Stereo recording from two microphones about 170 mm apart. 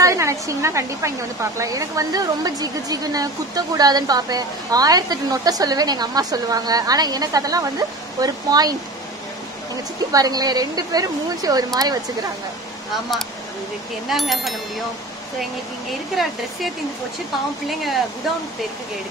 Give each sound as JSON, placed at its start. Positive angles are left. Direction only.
{"t": 0.0, "sound": "a woman's voice", "side_deg": -15}
{"t": 10.1, "sound": "a woman's voice", "side_deg": -20}
{"t": 14.0, "sound": "speech", "side_deg": 0}
{"t": 17.6, "sound": "speech", "side_deg": 0}